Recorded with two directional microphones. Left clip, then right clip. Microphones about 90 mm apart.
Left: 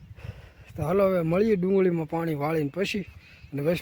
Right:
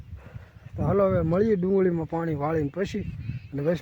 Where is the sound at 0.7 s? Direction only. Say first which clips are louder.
Even; 10° left (ahead or behind).